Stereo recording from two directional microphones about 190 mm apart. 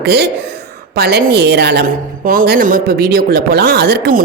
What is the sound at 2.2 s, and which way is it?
Speech, 45° right (ahead or behind).